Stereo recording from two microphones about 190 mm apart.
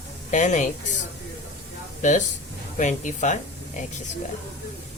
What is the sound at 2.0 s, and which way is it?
Speech, 40° left (ahead or behind).